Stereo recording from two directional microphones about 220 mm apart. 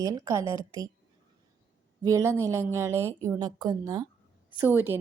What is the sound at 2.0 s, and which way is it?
A woman's voice, 15° right (ahead or behind).